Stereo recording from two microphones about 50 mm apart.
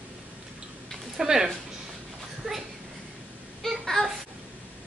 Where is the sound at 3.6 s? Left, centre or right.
Centre.